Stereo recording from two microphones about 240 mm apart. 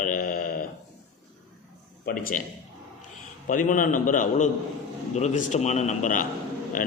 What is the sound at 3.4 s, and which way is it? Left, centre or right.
A man's voice, left.